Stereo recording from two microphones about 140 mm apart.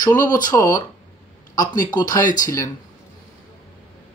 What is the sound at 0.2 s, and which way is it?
Speech, 30° left (ahead or behind).